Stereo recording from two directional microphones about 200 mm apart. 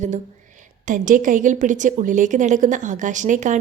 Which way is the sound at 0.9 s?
40° right (ahead or behind).